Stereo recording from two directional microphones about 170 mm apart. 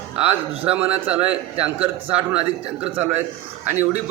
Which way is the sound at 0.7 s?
10° right (ahead or behind).